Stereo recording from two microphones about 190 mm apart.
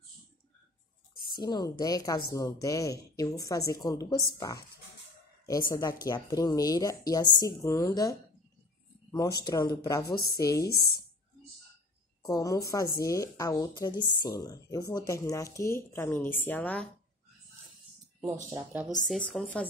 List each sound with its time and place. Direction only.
1.3 s a woman's voice: 20° left (ahead or behind)
5.7 s a woman's voice: 20° left (ahead or behind)
12.3 s a woman's voice: 15° left (ahead or behind)
18.2 s speech: 15° right (ahead or behind)
19.0 s speech: 5° left (ahead or behind)